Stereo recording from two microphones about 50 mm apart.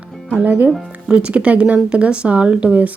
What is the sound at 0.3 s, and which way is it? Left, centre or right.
Speech, right.